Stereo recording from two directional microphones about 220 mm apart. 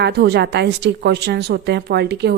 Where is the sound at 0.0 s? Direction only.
45° right (ahead or behind).